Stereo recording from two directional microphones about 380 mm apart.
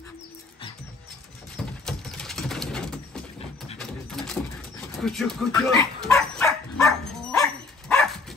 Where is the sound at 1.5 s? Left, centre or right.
Centre.